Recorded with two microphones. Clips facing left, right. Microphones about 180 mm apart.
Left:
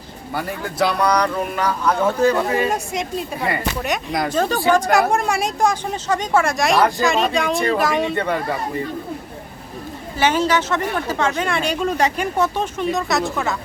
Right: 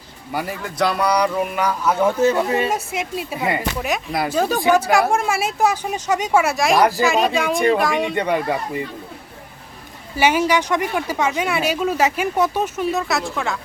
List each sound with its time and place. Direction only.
0.6 s speech: centre (ahead or behind)
2.2 s speech: 25° right (ahead or behind)
2.6 s speech: 5° right (ahead or behind)
8.1 s speech: 15° right (ahead or behind)
10.2 s speech: 10° right (ahead or behind)